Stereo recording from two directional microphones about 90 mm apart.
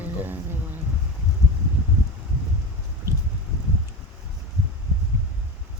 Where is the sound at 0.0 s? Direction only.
20° right (ahead or behind).